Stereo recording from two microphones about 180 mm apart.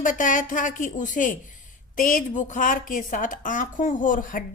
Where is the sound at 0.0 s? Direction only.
45° left (ahead or behind).